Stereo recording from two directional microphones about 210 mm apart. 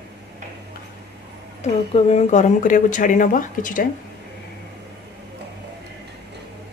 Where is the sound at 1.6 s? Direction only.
30° left (ahead or behind).